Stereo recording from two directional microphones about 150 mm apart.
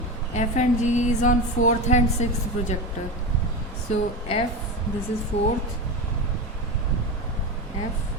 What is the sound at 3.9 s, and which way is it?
Speech, 40° left (ahead or behind).